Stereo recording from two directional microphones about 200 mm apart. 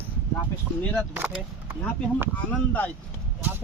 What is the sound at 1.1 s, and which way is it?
Speech, 10° right (ahead or behind).